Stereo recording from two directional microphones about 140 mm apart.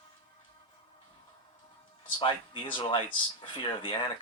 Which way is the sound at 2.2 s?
35° left (ahead or behind).